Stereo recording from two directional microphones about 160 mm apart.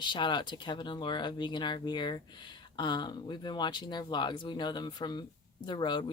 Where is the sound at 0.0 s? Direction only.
30° left (ahead or behind).